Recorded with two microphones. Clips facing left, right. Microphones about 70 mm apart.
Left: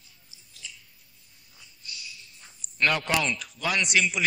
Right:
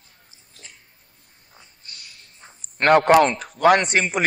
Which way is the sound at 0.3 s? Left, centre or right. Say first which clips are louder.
Left 2 dB; right.